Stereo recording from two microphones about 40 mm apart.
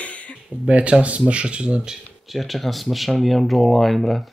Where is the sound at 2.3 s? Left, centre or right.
Centre.